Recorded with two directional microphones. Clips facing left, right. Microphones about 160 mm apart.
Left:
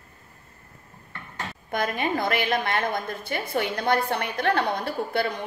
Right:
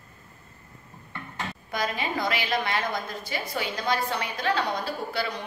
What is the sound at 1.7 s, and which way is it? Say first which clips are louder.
A woman's voice: left 4 dB; 55° left (ahead or behind).